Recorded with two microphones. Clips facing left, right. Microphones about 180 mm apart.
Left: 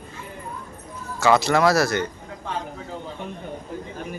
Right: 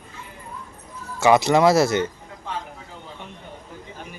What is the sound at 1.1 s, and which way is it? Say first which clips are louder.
Speech: right 2 dB; 20° right (ahead or behind).